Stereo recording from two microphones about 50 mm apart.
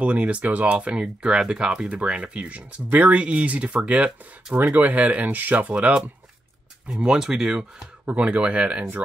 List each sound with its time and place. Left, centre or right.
0.0 s speech: right
4.6 s speech: right
6.9 s speech: centre
8.0 s speech: right